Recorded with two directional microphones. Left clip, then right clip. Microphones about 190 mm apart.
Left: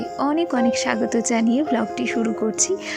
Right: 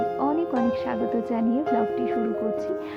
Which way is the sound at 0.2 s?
25° left (ahead or behind).